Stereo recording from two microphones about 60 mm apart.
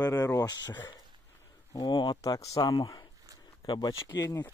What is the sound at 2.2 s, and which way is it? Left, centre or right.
Speech, left.